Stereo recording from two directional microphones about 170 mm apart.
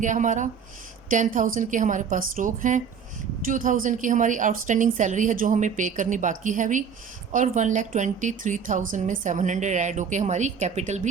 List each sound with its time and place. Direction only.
0.0 s a woman's voice: 45° right (ahead or behind)